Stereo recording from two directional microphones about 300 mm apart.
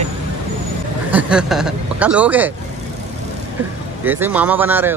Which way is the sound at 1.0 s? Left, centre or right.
Centre.